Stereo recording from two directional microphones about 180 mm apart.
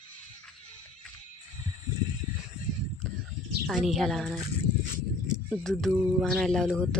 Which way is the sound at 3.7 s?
Centre (ahead or behind).